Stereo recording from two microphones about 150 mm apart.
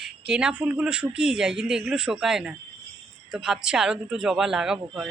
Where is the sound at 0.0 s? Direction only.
5° right (ahead or behind).